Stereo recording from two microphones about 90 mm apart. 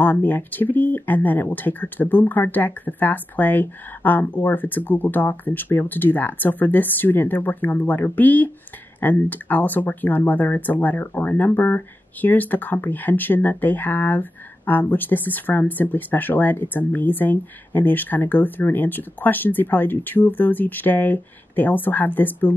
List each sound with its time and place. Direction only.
0.0 s speech: 20° left (ahead or behind)